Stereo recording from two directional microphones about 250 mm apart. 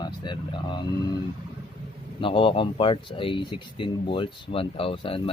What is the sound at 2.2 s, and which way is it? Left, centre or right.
Speech, left.